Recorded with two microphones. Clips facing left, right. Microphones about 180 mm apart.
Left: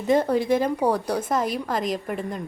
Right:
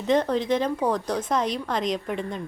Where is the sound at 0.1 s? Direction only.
10° left (ahead or behind).